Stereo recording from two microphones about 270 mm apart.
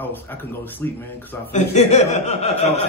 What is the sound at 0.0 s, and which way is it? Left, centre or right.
Speech, centre.